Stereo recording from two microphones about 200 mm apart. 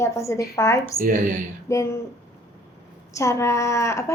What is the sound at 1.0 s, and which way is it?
Speech, 40° right (ahead or behind).